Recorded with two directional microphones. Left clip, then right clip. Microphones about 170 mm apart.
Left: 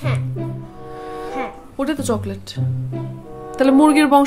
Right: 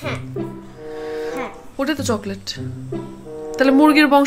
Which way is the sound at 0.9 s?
10° left (ahead or behind).